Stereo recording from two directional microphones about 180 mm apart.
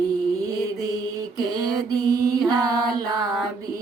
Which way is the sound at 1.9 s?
20° right (ahead or behind).